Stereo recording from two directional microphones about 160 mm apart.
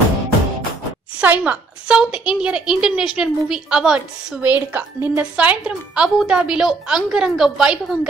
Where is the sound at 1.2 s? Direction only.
10° right (ahead or behind).